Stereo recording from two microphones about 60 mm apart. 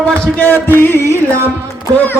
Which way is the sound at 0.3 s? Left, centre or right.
Left.